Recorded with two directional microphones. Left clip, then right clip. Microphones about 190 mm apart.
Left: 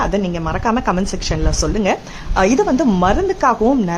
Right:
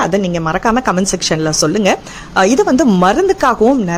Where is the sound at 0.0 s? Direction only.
20° right (ahead or behind).